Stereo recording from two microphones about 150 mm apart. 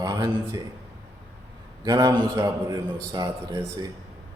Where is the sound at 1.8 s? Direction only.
25° right (ahead or behind).